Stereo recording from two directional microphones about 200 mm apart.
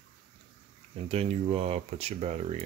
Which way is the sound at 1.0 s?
30° right (ahead or behind).